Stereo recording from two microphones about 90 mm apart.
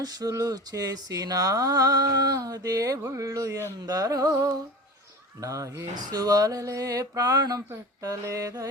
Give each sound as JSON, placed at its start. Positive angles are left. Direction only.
{"t": 0.0, "sound": "speech", "side_deg": -45}
{"t": 3.0, "sound": "music", "side_deg": -35}
{"t": 5.4, "sound": "speech", "side_deg": -35}
{"t": 8.0, "sound": "music", "side_deg": -40}